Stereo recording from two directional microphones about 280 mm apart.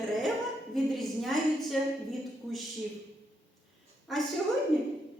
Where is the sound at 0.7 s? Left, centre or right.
Centre.